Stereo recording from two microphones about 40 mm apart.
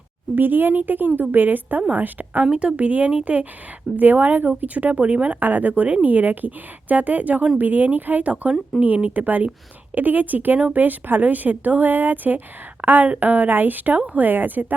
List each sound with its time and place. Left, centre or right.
0.3 s a woman's voice: right
2.5 s speech: right
3.9 s a woman's voice: right
5.4 s a woman's voice: right